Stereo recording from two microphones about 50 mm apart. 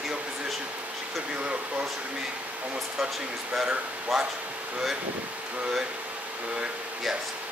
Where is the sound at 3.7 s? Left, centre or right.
Right.